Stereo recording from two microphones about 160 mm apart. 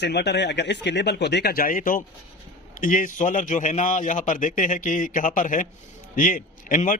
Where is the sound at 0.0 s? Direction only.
90° left.